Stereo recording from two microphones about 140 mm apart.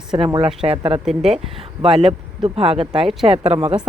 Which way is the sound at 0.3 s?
45° right (ahead or behind).